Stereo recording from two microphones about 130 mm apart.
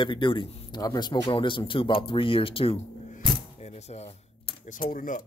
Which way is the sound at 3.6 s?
55° left (ahead or behind).